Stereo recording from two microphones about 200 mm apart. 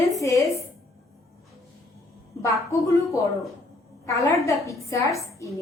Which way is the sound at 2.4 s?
15° left (ahead or behind).